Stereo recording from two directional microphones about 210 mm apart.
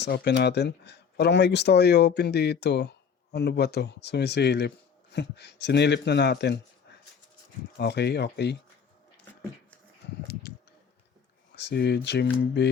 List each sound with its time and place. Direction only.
0.0 s speech: 55° left (ahead or behind)
7.8 s speech: 55° left (ahead or behind)
10.0 s a sound: 55° left (ahead or behind)
11.5 s speech: 55° left (ahead or behind)